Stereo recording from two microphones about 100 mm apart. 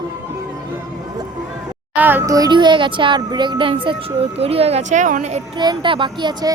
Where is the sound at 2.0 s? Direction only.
20° right (ahead or behind).